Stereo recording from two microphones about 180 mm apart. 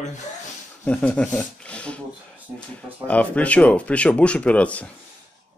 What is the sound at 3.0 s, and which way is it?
Speech, 5° left (ahead or behind).